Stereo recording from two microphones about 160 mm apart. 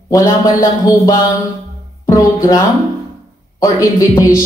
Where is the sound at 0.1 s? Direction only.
20° left (ahead or behind).